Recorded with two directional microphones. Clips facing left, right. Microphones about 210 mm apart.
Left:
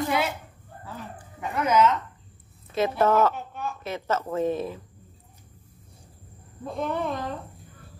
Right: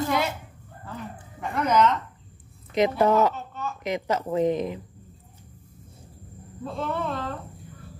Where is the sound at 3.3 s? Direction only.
15° left (ahead or behind).